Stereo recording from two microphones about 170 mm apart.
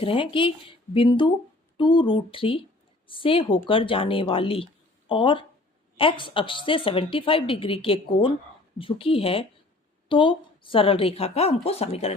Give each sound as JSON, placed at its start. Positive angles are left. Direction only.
{"t": 0.0, "sound": "speech", "side_deg": 30}